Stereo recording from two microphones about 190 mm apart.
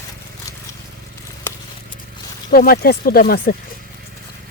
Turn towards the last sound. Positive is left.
turn(degrees=50)  # may be behind; listen again after turning